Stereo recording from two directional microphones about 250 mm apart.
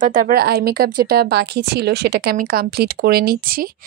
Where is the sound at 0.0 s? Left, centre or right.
Right.